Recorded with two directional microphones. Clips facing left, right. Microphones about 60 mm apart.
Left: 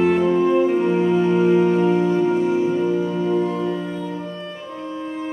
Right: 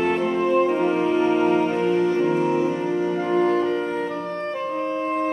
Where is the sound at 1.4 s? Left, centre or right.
Right.